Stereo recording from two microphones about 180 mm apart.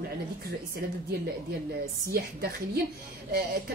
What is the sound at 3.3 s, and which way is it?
Speech, 60° right (ahead or behind).